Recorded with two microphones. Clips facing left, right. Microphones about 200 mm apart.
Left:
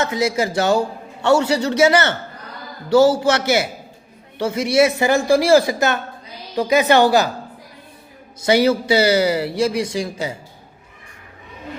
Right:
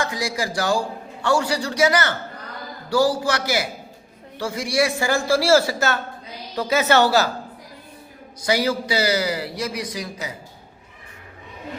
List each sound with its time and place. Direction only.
0.0 s a man's voice: 25° left (ahead or behind)
8.4 s a man's voice: 25° left (ahead or behind)